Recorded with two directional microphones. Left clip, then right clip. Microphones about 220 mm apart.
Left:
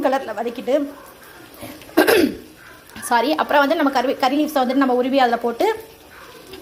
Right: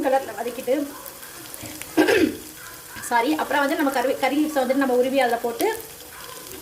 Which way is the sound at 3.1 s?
20° left (ahead or behind).